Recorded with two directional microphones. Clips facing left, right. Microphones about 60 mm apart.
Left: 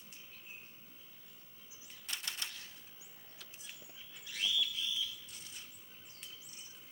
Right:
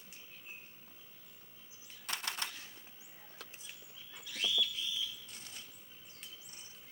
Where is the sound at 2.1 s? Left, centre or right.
Right.